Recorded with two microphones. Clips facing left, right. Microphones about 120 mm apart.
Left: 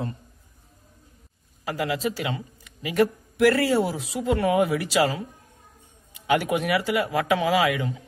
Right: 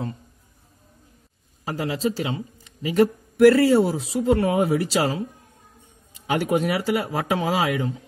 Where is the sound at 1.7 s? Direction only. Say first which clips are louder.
Right 1 dB; 30° right (ahead or behind).